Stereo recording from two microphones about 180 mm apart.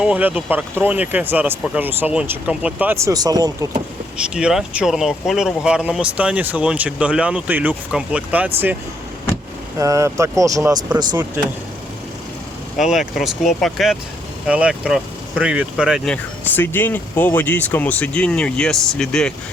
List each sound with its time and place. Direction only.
0.0 s speech: 10° right (ahead or behind)
4.4 s speech: 5° right (ahead or behind)
9.7 s speech: 15° right (ahead or behind)
12.7 s speech: centre (ahead or behind)